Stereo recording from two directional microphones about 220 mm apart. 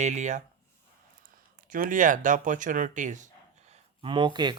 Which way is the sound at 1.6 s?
40° right (ahead or behind).